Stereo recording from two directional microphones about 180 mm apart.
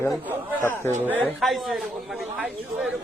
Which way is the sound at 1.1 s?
5° left (ahead or behind).